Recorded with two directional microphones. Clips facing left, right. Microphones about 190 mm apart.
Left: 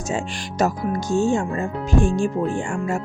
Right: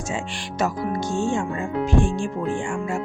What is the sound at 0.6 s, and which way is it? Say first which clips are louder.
Speech: left 2 dB; 40° left (ahead or behind).